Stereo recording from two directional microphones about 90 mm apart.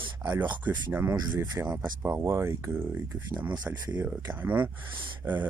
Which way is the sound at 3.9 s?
20° right (ahead or behind).